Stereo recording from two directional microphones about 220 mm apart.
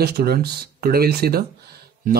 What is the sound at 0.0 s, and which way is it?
Speech, 45° right (ahead or behind).